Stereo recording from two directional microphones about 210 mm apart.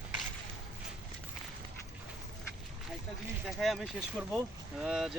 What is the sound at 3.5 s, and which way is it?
Speech, centre (ahead or behind).